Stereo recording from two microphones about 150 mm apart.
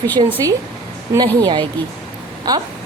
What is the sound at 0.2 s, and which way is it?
Speech, 40° right (ahead or behind).